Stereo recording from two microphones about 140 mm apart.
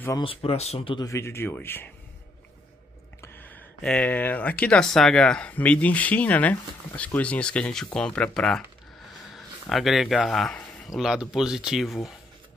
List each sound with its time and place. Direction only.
0.2 s speech: 40° left (ahead or behind)
1.0 s speech: 20° left (ahead or behind)
3.2 s speech: 15° left (ahead or behind); by 12.0 s centre (ahead or behind)